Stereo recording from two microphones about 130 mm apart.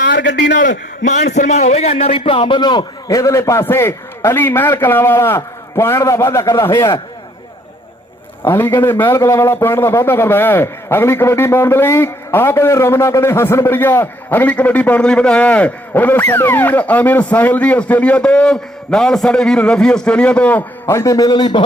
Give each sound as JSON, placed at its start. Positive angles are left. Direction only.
{"t": 0.5, "sound": "a man's voice", "side_deg": 75}
{"t": 8.4, "sound": "a man's voice", "side_deg": 15}